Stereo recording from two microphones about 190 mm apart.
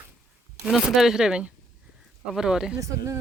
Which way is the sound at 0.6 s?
Centre (ahead or behind).